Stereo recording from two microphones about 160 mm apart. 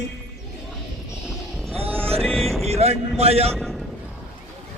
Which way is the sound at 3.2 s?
40° right (ahead or behind).